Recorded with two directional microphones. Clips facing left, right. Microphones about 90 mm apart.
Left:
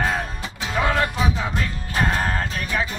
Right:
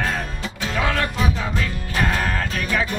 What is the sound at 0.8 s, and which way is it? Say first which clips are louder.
Music: left 2 dB; 20° left (ahead or behind).